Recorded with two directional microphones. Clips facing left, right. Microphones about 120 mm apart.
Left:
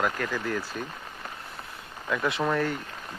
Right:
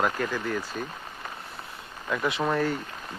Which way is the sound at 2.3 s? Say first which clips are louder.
Right 1 dB; 5° right (ahead or behind).